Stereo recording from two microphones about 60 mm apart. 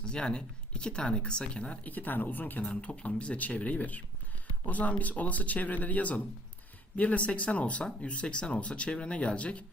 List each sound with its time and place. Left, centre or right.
0.0 s speech: centre